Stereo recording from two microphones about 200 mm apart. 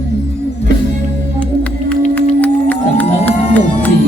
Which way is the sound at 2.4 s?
10° left (ahead or behind).